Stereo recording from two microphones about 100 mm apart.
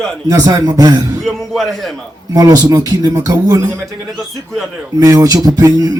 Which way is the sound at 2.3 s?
35° right (ahead or behind).